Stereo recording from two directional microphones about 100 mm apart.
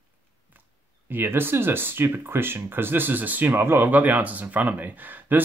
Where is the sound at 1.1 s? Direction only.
20° right (ahead or behind).